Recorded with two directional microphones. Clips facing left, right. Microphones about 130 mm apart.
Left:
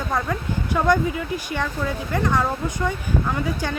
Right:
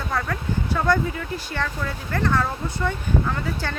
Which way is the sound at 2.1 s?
15° left (ahead or behind).